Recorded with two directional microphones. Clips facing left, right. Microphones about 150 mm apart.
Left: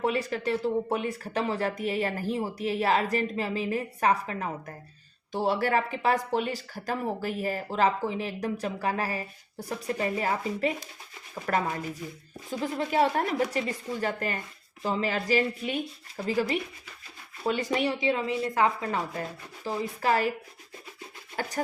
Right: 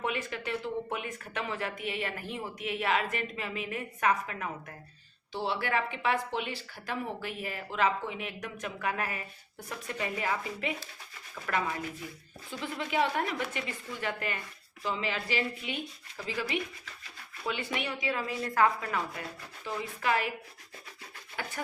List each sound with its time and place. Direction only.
0.0 s speech: 35° left (ahead or behind)
5.3 s speech: 45° left (ahead or behind)
21.4 s speech: 40° left (ahead or behind)